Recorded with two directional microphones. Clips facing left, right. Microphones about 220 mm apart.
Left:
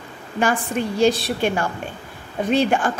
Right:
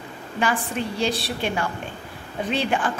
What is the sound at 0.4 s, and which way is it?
A woman's voice, 45° left (ahead or behind).